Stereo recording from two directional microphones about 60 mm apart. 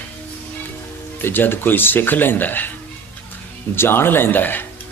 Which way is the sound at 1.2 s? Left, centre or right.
Left.